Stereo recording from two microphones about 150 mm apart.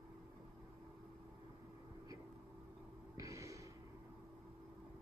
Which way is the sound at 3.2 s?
20° right (ahead or behind).